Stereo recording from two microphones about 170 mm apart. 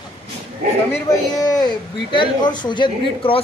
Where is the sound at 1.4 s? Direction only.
25° left (ahead or behind).